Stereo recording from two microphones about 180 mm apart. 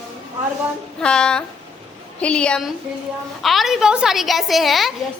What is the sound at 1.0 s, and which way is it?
A woman's voice, 5° left (ahead or behind).